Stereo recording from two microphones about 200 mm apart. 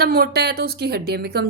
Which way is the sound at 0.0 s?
50° right (ahead or behind).